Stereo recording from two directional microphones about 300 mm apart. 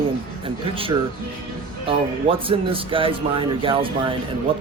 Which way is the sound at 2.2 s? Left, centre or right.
Centre.